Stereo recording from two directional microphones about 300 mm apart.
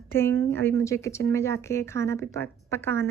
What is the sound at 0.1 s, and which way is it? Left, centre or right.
A woman's voice, centre.